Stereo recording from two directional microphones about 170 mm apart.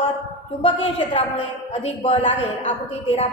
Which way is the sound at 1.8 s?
35° left (ahead or behind).